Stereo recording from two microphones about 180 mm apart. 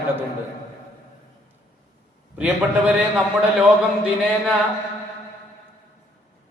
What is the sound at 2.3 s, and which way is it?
Speech, 10° right (ahead or behind).